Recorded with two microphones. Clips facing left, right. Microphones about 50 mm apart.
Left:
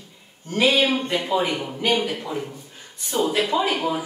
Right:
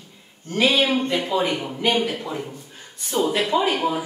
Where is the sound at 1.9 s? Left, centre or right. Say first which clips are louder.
Right 1 dB; centre.